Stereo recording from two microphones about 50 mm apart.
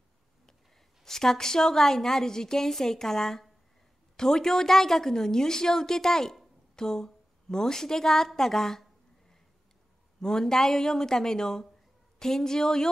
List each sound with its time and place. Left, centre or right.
1.0 s a woman's voice: centre
10.2 s a woman's voice: centre